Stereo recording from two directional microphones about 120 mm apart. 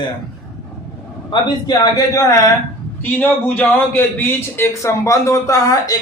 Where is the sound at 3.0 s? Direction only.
15° left (ahead or behind).